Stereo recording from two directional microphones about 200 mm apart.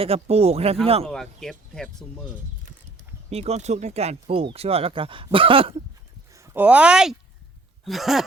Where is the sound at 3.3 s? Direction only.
30° right (ahead or behind).